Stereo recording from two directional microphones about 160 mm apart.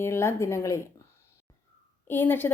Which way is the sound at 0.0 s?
15° left (ahead or behind).